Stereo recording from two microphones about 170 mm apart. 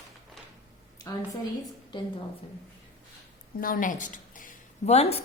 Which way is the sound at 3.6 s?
55° left (ahead or behind).